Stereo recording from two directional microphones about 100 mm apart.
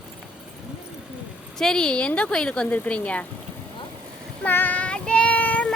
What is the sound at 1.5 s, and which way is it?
A woman's voice, 5° left (ahead or behind).